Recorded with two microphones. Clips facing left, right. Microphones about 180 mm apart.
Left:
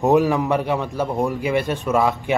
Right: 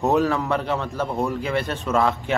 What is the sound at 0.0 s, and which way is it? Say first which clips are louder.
A man's voice: left 4 dB; 15° left (ahead or behind).